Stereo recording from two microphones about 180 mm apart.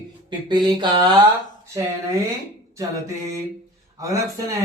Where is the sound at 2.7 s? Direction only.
15° right (ahead or behind).